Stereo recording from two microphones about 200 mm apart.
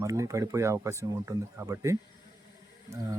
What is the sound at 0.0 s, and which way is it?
Speech, 15° right (ahead or behind).